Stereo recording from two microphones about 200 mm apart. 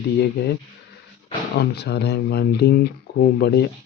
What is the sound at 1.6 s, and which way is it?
Speech, 55° left (ahead or behind).